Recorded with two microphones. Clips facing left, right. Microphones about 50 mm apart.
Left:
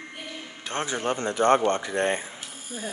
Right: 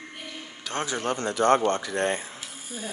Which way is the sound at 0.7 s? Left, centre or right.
Left.